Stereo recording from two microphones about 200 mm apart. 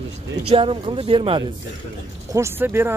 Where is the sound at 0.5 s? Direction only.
25° right (ahead or behind).